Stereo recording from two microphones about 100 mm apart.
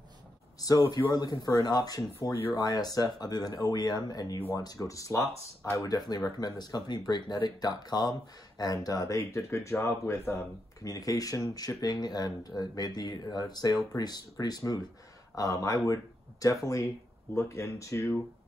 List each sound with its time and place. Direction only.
0.6 s speech: 35° left (ahead or behind)